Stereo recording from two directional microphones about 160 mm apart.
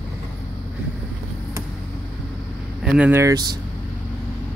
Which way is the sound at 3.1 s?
25° right (ahead or behind).